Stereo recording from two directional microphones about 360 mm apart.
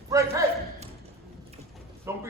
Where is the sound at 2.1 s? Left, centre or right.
Centre.